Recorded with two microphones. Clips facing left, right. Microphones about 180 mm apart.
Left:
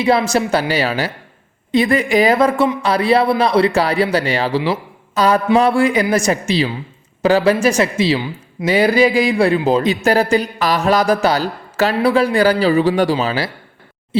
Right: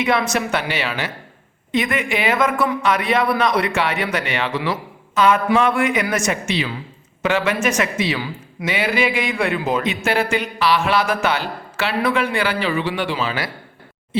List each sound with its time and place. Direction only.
0.0 s a man's voice: 30° left (ahead or behind)